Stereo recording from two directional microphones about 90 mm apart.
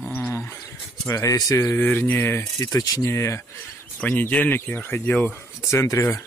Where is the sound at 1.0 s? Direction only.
35° left (ahead or behind).